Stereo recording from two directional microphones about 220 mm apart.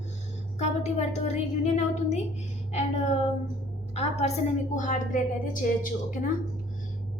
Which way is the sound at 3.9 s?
30° left (ahead or behind).